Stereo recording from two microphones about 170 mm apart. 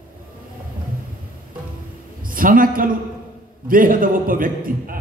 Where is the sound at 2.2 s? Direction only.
55° right (ahead or behind).